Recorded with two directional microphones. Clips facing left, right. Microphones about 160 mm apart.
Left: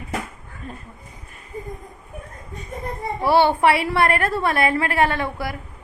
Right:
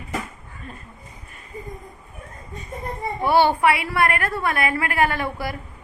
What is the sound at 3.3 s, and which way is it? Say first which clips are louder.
A woman's voice: left 1 dB; 30° left (ahead or behind).